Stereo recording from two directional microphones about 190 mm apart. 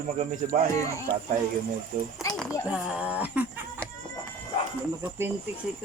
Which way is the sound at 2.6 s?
5° right (ahead or behind).